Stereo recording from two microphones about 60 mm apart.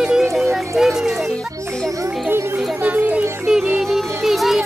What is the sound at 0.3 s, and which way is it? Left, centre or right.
Music, centre.